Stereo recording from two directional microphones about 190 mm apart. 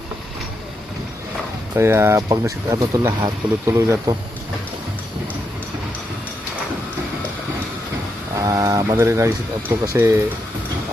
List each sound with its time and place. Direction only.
1.7 s speech: 15° right (ahead or behind)
8.4 s speech: 15° right (ahead or behind)